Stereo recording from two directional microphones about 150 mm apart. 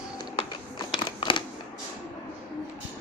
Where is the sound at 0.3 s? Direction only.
30° left (ahead or behind).